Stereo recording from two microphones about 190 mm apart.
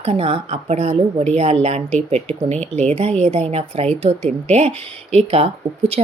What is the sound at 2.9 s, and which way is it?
Speech, 35° right (ahead or behind).